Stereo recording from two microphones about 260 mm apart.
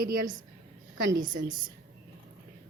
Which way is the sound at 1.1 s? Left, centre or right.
Centre.